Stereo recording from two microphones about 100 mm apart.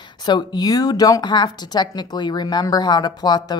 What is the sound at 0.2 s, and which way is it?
A woman's voice, 45° left (ahead or behind).